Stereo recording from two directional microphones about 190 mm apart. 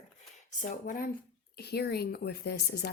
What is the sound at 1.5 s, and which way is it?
A woman's voice, 55° left (ahead or behind).